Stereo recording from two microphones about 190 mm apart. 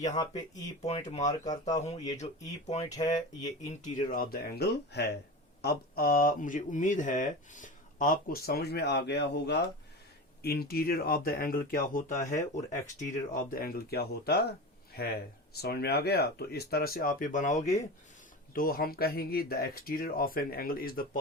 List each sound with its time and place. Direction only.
0.2 s speech: 20° left (ahead or behind)
0.9 s speech: 35° left (ahead or behind)
1.2 s speech: 20° left (ahead or behind)
1.8 s speech: 35° left (ahead or behind)
3.6 s speech: 40° left (ahead or behind); by 5.1 s 60° left (ahead or behind)
5.6 s speech: 50° left (ahead or behind)
15.5 s speech: 55° left (ahead or behind); by 17.7 s 40° left (ahead or behind)
18.5 s speech: 50° left (ahead or behind)